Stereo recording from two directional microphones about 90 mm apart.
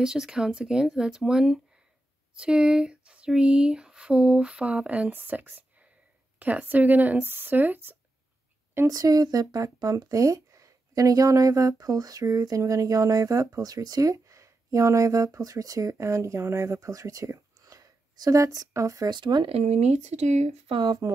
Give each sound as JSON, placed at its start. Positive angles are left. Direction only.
{"t": 0.0, "sound": "speech", "side_deg": -5}
{"t": 8.8, "sound": "speech", "side_deg": -45}
{"t": 19.0, "sound": "speech", "side_deg": -55}
{"t": 20.8, "sound": "speech", "side_deg": -50}